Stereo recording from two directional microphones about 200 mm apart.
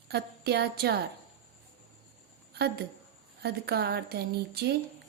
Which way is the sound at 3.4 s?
55° right (ahead or behind).